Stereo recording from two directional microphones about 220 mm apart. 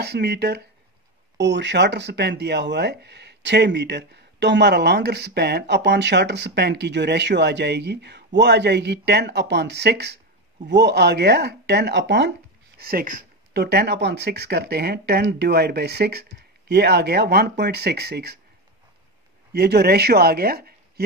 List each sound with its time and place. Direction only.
0.0 s speech: 50° right (ahead or behind)
19.5 s speech: 45° right (ahead or behind)